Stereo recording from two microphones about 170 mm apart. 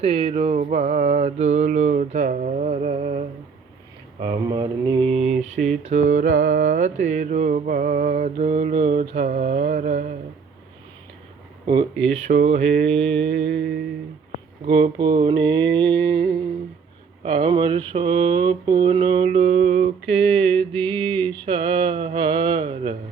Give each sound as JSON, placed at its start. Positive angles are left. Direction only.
{"t": 0.0, "sound": "mantra", "side_deg": -35}
{"t": 4.4, "sound": "mantra", "side_deg": -25}
{"t": 11.6, "sound": "mantra", "side_deg": -30}
{"t": 13.4, "sound": "music", "side_deg": -90}
{"t": 14.7, "sound": "mantra", "side_deg": -30}
{"t": 17.2, "sound": "mantra", "side_deg": -30}
{"t": 20.6, "sound": "mantra", "side_deg": 5}
{"t": 21.4, "sound": "mantra", "side_deg": -30}